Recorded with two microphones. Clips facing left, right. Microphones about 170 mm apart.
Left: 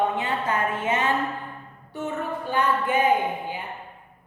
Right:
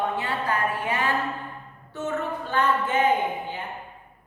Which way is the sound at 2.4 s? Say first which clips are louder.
Left 1 dB; 15° left (ahead or behind).